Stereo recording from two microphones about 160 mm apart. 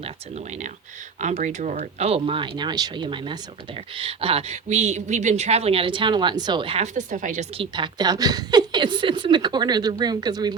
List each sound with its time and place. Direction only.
0.0 s speech: 45° right (ahead or behind)
7.5 s a woman's voice: 30° right (ahead or behind)